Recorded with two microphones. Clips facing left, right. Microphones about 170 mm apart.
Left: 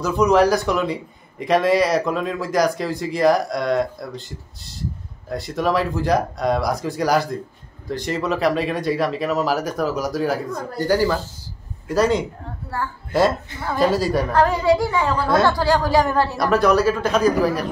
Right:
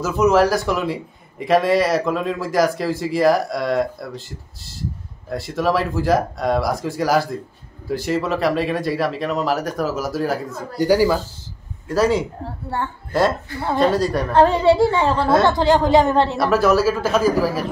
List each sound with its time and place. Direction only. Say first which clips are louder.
0.0 s speech: even; 5° right (ahead or behind)
10.8 s speech: right 3 dB; 10° right (ahead or behind)
12.4 s a woman's voice: right 2 dB; 25° right (ahead or behind)
13.7 s speech: even; 5° left (ahead or behind)
14.3 s a woman's voice: right 4 dB; 25° right (ahead or behind)
16.3 s speech: right 1 dB; 5° right (ahead or behind)